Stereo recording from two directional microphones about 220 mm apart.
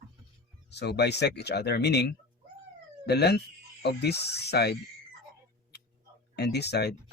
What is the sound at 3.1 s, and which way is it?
Speech, 50° left (ahead or behind).